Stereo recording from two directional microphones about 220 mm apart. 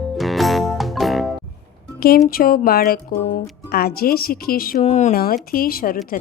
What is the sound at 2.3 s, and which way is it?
Speech, 40° left (ahead or behind).